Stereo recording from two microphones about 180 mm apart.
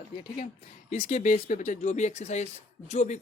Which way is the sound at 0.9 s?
50° left (ahead or behind).